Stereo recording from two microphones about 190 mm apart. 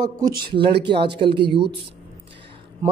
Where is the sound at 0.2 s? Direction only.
50° right (ahead or behind).